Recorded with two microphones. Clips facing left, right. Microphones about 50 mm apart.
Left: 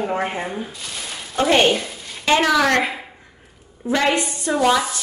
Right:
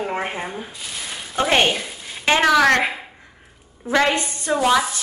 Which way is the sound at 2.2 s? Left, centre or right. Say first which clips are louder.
Even; right.